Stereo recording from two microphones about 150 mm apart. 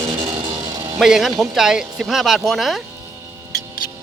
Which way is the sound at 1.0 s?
Centre (ahead or behind).